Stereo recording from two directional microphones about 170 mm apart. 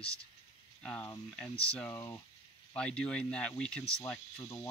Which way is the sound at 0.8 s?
5° left (ahead or behind).